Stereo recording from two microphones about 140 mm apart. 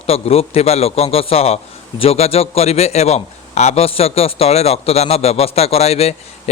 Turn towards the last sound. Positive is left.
turn(degrees=50)  # may be behind; listen again after turning